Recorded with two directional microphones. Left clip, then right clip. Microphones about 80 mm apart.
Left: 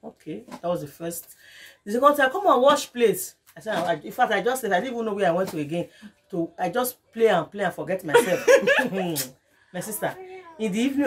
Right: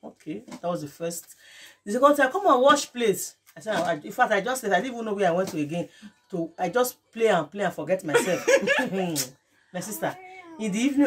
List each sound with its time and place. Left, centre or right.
0.6 s speech: right
8.1 s speech: left
9.1 s speech: right